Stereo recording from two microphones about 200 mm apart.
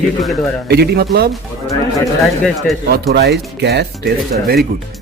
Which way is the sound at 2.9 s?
55° right (ahead or behind).